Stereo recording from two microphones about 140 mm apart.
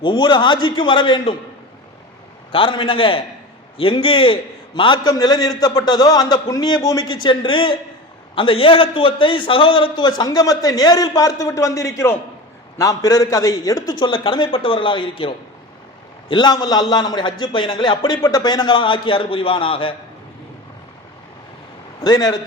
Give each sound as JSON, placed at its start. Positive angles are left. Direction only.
{"t": 0.0, "sound": "a man's voice", "side_deg": 35}
{"t": 2.5, "sound": "a man's voice", "side_deg": 40}
{"t": 16.3, "sound": "a man's voice", "side_deg": 30}
{"t": 22.0, "sound": "a man's voice", "side_deg": 30}